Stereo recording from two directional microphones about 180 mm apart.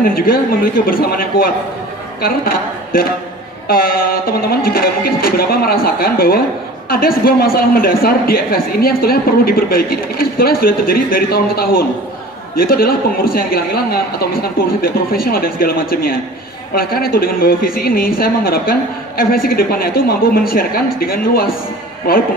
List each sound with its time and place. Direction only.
0.0 s speech: 55° left (ahead or behind)